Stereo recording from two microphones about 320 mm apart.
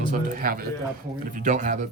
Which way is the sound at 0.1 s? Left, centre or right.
Right.